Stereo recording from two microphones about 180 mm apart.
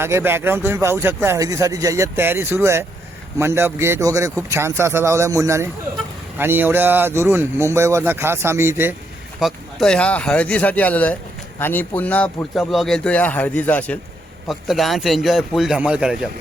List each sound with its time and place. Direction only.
0.0 s speech: 15° right (ahead or behind)
9.4 s a man's voice: centre (ahead or behind)